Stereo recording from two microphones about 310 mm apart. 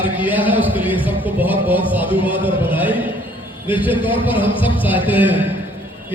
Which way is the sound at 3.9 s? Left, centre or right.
Centre.